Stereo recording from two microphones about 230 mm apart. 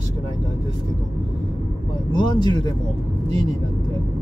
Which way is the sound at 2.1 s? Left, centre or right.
Centre.